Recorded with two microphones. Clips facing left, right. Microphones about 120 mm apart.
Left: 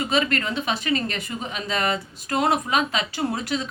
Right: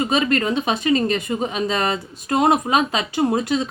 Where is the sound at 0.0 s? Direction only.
20° right (ahead or behind).